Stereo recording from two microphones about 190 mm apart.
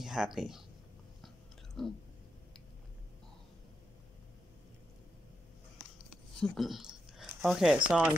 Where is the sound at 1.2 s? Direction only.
Centre (ahead or behind).